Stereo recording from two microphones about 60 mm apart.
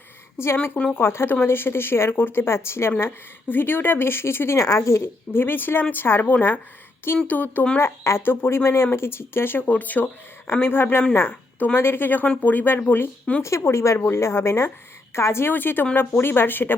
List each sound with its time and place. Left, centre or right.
0.5 s speech: left
3.5 s speech: left
4.5 s speech: left
5.3 s speech: left
7.8 s a woman's voice: left
13.4 s a woman's voice: left
15.5 s speech: left